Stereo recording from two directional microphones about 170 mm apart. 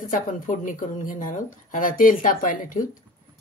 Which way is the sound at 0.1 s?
50° left (ahead or behind).